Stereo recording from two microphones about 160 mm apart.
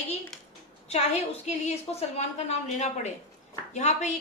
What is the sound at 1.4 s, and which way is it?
A woman's voice, 45° left (ahead or behind).